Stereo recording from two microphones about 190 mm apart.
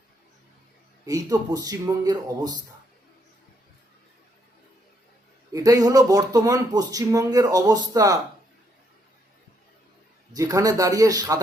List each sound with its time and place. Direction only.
1.0 s speech: 20° right (ahead or behind)
5.5 s speech: 15° right (ahead or behind)
10.3 s a man's voice: 20° right (ahead or behind)